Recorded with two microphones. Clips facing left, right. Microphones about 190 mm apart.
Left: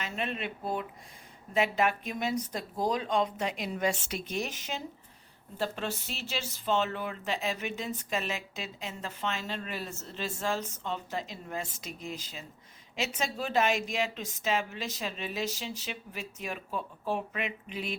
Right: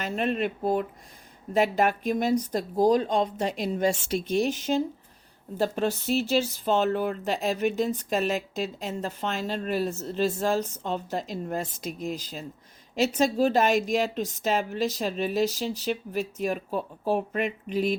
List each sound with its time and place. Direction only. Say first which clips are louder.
0.0 s speech: right 8 dB; 40° right (ahead or behind)